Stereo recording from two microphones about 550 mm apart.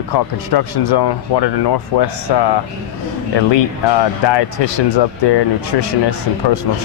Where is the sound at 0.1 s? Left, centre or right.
Left.